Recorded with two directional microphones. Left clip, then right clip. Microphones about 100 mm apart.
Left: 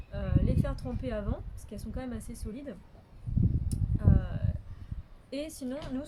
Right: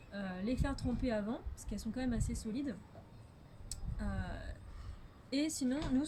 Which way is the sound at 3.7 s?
20° left (ahead or behind).